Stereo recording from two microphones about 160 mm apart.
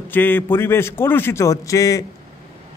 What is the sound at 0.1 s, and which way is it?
A man's voice, 10° left (ahead or behind).